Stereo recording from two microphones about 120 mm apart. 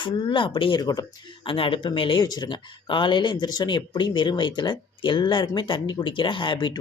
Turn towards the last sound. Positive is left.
turn(degrees=40)  # may be behind; listen again after turning